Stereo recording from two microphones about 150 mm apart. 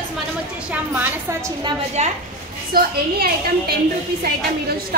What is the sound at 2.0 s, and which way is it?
Speech, 45° right (ahead or behind).